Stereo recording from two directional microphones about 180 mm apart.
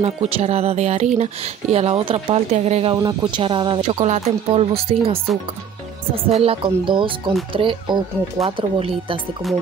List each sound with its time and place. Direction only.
0.0 s speech: 35° right (ahead or behind)
3.0 s speech: 20° right (ahead or behind)
9.4 s speech: centre (ahead or behind)